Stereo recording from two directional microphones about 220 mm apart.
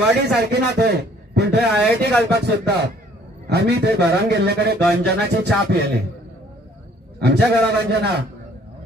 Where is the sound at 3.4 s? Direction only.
45° right (ahead or behind).